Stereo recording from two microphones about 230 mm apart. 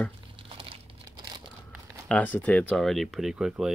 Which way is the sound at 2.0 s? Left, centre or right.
Centre.